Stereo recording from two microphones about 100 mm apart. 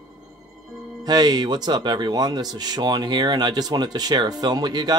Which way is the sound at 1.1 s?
45° right (ahead or behind).